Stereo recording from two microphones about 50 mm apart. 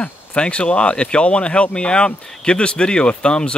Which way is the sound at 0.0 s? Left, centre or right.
Left.